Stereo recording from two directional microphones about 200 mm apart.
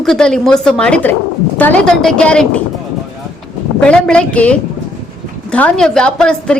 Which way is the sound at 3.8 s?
5° left (ahead or behind).